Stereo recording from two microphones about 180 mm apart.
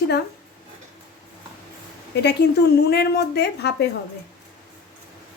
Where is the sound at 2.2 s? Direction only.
65° left (ahead or behind).